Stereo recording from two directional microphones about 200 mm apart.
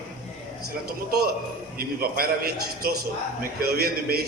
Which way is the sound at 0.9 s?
50° right (ahead or behind).